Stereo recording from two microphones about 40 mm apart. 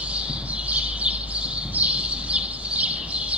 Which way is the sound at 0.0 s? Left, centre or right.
Right.